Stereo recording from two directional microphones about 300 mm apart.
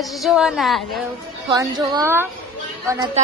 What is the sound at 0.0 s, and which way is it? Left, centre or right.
A woman's voice, centre.